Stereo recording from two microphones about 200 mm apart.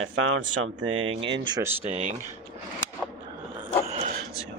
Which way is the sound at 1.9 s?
35° right (ahead or behind).